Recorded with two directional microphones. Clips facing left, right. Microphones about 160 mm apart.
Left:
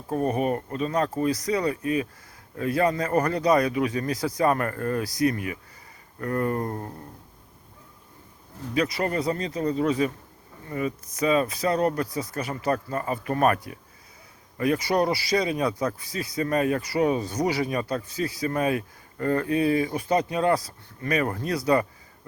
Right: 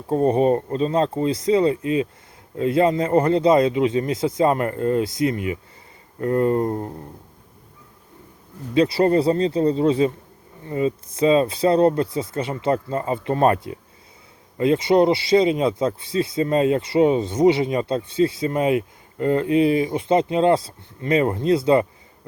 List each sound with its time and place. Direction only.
0.1 s speech: 30° right (ahead or behind)
8.7 s speech: 30° right (ahead or behind)